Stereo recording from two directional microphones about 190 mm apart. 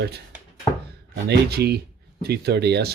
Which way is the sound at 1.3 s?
55° right (ahead or behind).